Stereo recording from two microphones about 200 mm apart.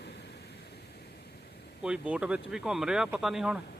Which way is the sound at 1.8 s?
5° right (ahead or behind).